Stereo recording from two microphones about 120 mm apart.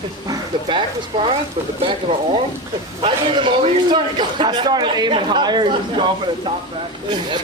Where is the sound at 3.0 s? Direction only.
45° right (ahead or behind).